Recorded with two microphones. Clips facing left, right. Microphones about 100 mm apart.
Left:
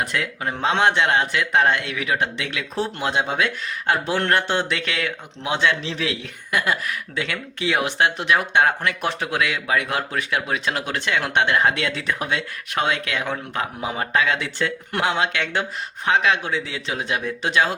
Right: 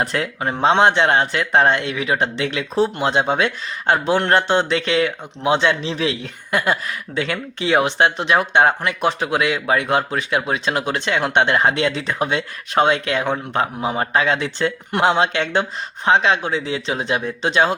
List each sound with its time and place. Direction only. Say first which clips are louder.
0.0 s speech: right 4 dB; 35° right (ahead or behind)